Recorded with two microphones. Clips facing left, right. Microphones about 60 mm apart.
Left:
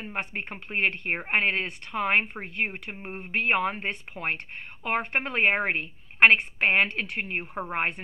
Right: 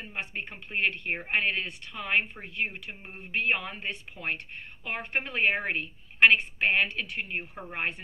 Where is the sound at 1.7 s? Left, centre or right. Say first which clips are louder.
Left 6 dB; left.